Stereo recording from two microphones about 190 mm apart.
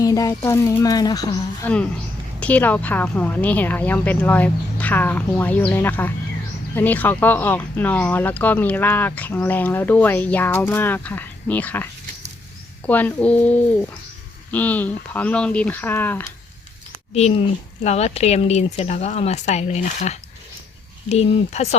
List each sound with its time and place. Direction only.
0.0 s speech: 15° left (ahead or behind)
2.4 s speech: 10° left (ahead or behind)
17.2 s speech: 35° left (ahead or behind)